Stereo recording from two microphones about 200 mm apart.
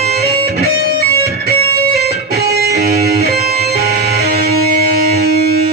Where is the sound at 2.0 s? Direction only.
50° right (ahead or behind).